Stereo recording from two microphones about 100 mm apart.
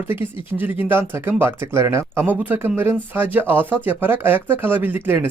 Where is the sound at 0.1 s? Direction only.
20° right (ahead or behind).